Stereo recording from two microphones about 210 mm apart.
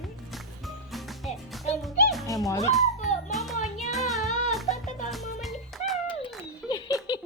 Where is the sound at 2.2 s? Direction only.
15° left (ahead or behind).